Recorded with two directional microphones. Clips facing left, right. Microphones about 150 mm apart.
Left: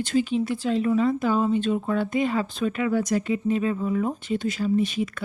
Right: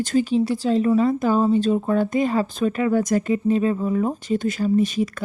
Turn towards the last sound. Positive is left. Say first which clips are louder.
# right 4 dB
turn(degrees=-40)  # may be behind; listen again after turning